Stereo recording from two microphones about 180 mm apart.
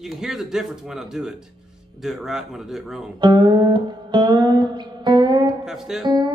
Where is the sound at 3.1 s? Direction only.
25° right (ahead or behind).